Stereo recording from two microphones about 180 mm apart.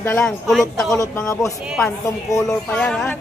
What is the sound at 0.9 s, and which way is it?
Speech, 20° left (ahead or behind).